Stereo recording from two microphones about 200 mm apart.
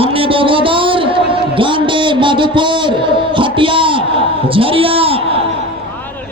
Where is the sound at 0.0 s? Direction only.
25° right (ahead or behind).